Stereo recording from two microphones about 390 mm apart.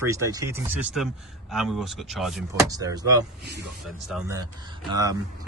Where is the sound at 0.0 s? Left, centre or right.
Centre.